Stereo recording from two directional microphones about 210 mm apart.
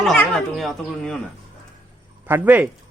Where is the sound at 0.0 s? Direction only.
Centre (ahead or behind).